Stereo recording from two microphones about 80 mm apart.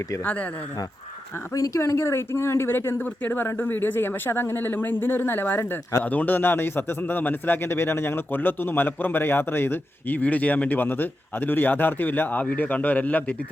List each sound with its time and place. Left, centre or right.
1.5 s a man's voice: left; by 13.3 s centre